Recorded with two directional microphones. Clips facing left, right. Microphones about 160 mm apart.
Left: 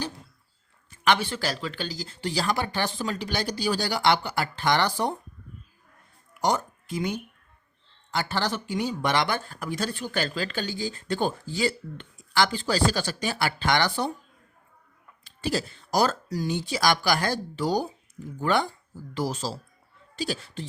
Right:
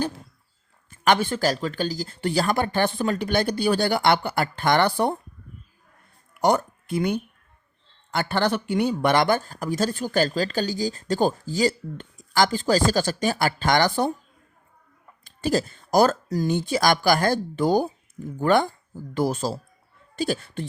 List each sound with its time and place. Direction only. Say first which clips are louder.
0.9 s speech: right 3 dB; 50° right (ahead or behind)
6.4 s speech: right 5 dB; 60° right (ahead or behind)
15.2 s speech: right 5 dB; 45° right (ahead or behind)